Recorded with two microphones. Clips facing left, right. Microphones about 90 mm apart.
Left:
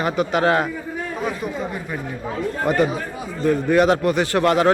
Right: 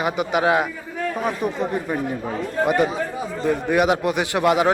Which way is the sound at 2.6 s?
20° right (ahead or behind).